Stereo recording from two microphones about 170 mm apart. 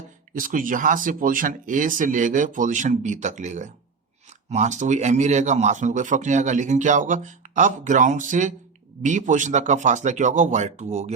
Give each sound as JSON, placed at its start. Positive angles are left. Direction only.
{"t": 0.3, "sound": "speech", "side_deg": -55}